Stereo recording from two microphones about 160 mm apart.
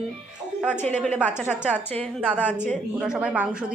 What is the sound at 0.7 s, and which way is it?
Speech, 50° right (ahead or behind).